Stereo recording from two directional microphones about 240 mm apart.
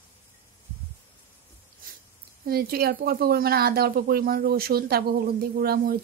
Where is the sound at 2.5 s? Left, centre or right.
Right.